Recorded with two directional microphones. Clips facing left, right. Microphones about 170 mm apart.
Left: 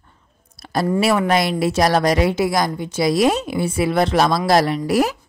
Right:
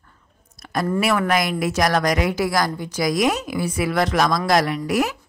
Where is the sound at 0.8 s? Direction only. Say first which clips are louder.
Left 3 dB; 25° left (ahead or behind).